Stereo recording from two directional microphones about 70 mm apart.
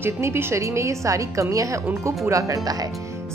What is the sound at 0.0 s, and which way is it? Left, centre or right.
A woman's voice, right.